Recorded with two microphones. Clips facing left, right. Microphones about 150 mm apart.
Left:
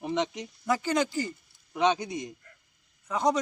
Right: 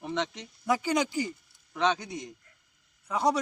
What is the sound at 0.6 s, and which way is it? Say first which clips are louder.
Speech: even; 10° right (ahead or behind).